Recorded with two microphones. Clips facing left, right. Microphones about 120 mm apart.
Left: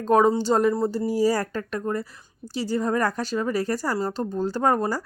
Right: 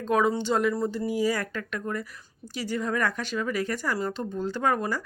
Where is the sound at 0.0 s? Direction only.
40° left (ahead or behind).